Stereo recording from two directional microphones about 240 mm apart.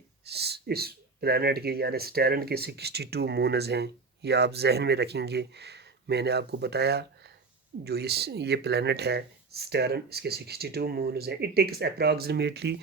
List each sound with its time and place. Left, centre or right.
0.3 s speech: right